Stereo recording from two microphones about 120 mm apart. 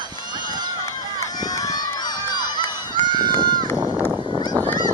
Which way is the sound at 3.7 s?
15° right (ahead or behind).